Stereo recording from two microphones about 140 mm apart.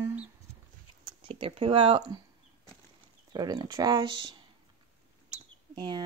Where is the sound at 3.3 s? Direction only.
30° right (ahead or behind).